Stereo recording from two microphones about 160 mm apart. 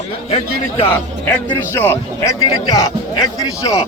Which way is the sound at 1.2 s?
15° left (ahead or behind).